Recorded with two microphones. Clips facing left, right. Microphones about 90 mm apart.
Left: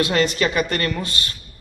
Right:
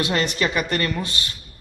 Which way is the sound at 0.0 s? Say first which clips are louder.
Left 3 dB; 20° right (ahead or behind).